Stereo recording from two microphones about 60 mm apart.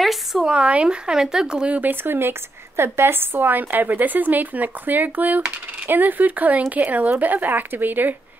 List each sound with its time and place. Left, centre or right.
0.0 s a sound: centre
0.5 s speech: centre
1.8 s speech: right